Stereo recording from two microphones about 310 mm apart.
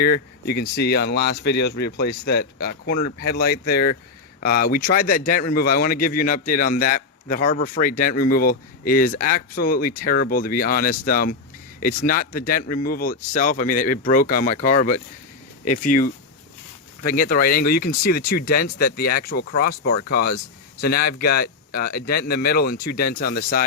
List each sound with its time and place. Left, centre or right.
0.0 s a man's voice: left